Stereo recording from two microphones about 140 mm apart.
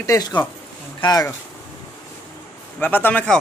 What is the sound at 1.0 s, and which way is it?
Speech, 30° left (ahead or behind).